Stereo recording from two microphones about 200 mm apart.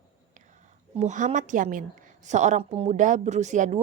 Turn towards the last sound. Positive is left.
turn(degrees=-35)  # may be behind; listen again after turning